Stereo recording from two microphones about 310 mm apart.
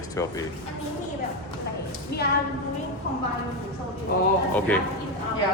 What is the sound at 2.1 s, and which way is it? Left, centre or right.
Speech, left.